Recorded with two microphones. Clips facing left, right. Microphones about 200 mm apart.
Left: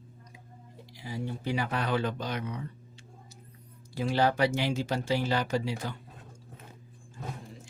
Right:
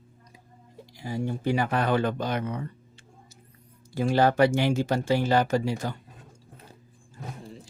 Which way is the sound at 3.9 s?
50° right (ahead or behind).